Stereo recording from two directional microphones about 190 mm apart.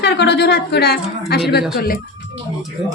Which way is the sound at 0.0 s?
60° left (ahead or behind).